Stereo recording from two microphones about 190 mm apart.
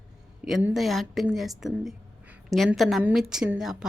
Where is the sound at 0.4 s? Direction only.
Centre (ahead or behind).